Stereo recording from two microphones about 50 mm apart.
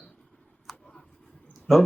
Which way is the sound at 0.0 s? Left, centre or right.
Centre.